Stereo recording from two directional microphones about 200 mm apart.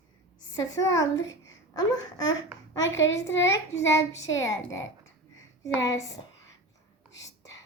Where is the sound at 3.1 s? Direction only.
15° left (ahead or behind).